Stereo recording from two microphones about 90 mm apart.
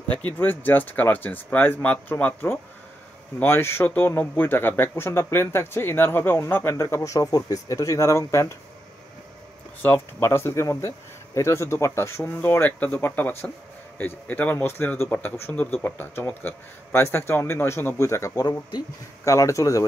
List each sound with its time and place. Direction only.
0.4 s speech: 20° left (ahead or behind)
9.8 s speech: 25° left (ahead or behind)